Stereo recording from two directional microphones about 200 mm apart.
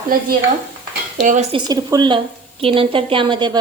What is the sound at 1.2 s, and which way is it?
Speech, 40° right (ahead or behind).